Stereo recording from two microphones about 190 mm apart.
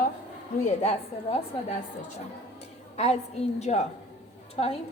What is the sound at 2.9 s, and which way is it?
A woman's voice, 35° left (ahead or behind).